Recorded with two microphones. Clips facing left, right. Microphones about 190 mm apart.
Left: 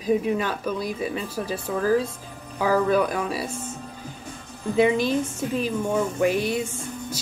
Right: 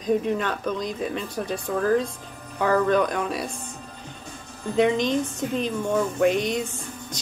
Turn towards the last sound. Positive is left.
turn(degrees=5)  # may be behind; listen again after turning